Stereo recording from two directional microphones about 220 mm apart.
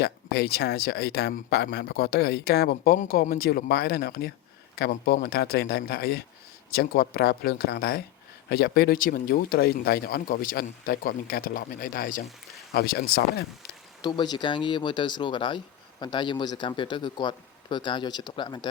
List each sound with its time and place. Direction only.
0.0 s speech: 45° left (ahead or behind)
14.0 s speech: 20° left (ahead or behind)